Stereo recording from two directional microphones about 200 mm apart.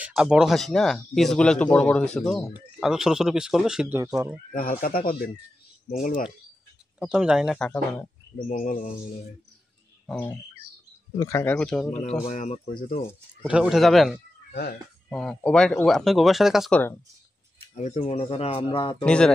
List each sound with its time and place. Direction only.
0.0 s speech: 5° right (ahead or behind)
4.0 s speech: 15° right (ahead or behind)
4.5 s speech: 45° left (ahead or behind)
7.0 s speech: 5° right (ahead or behind)
8.5 s speech: 40° left (ahead or behind)
10.0 s speech: 10° left (ahead or behind)
12.3 s speech: 35° left (ahead or behind)
13.5 s speech: 5° right (ahead or behind)
14.5 s speech: 50° left (ahead or behind)
15.0 s speech: 5° left (ahead or behind)
17.7 s speech: 35° left (ahead or behind)
19.0 s speech: 5° left (ahead or behind)